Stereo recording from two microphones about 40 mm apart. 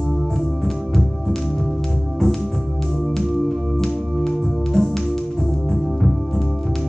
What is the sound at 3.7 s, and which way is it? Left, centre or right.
Music, centre.